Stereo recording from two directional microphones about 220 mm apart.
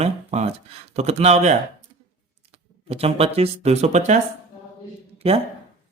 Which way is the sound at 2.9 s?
25° right (ahead or behind).